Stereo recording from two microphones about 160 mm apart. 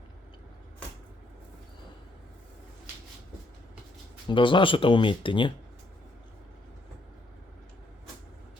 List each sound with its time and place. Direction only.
4.3 s speech: 30° left (ahead or behind)